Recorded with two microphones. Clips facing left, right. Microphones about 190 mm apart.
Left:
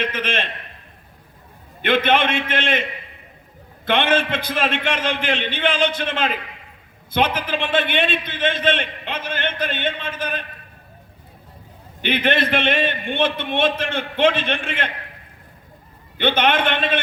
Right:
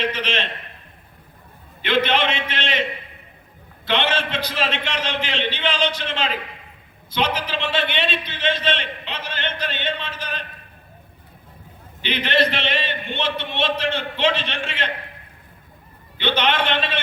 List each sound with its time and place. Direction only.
0.0 s a man's voice: 50° left (ahead or behind)
1.8 s a man's voice: 50° left (ahead or behind)
3.8 s a man's voice: 50° left (ahead or behind)
12.0 s a man's voice: 50° left (ahead or behind)
16.1 s a man's voice: 50° left (ahead or behind)